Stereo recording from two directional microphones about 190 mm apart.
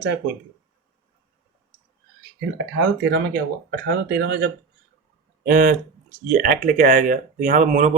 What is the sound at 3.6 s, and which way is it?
Speech, 55° right (ahead or behind).